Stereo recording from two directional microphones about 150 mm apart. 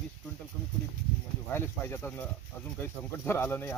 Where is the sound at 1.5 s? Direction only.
15° left (ahead or behind).